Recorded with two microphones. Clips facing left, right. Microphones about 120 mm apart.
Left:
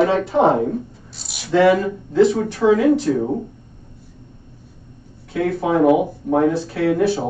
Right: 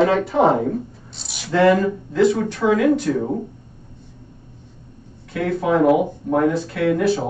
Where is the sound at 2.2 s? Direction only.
30° left (ahead or behind).